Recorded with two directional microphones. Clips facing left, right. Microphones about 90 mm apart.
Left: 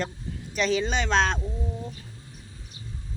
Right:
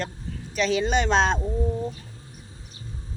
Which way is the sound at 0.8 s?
15° right (ahead or behind).